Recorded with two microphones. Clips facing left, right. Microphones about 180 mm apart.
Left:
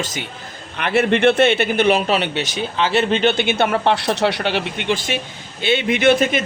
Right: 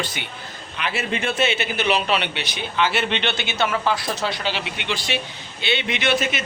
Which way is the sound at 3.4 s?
55° left (ahead or behind).